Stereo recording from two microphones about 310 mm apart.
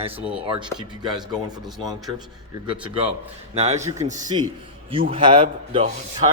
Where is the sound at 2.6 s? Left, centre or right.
Centre.